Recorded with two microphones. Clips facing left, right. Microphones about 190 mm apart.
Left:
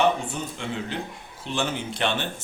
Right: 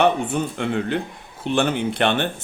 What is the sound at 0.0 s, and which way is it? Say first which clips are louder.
Speech: right 4 dB; 60° right (ahead or behind).